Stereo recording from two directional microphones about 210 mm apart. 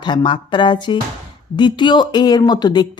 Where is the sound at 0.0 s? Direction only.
20° left (ahead or behind).